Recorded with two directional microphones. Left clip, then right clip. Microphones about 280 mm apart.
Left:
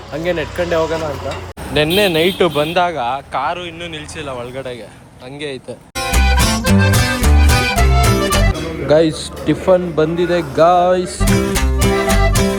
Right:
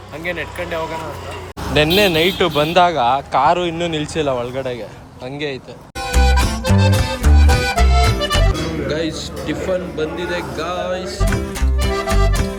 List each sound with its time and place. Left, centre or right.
0.3 s speech: centre
1.7 s speech: centre
6.0 s music: centre